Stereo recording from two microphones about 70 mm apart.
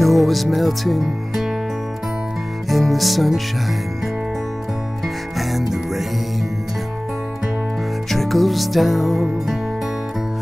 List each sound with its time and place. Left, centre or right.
0.0 s speech: centre
2.7 s speech: centre
5.0 s music: centre
8.1 s music: centre